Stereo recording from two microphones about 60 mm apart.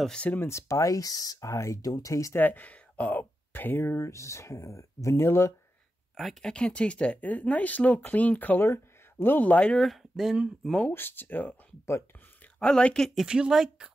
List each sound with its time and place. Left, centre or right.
0.1 s speech: left
0.4 s speech: left
2.3 s speech: left
6.4 s speech: centre
8.6 s speech: left
9.8 s speech: centre
10.9 s speech: left
12.5 s speech: centre
13.1 s speech: centre